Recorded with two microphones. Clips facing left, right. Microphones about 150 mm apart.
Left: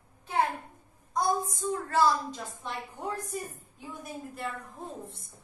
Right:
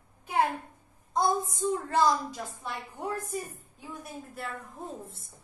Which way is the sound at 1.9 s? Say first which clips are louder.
Left 1 dB; 15° right (ahead or behind).